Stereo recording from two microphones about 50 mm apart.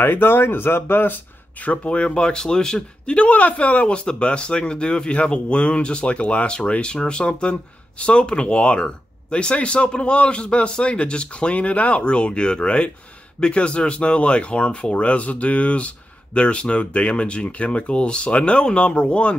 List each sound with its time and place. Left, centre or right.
0.0 s speech: left
1.7 s speech: left